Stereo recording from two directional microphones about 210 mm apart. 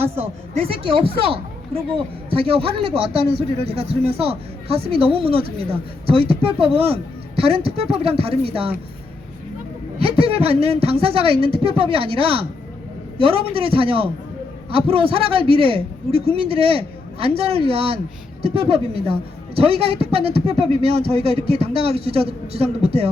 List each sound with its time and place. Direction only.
0.0 s speech: 30° right (ahead or behind)
10.0 s speech: 25° right (ahead or behind)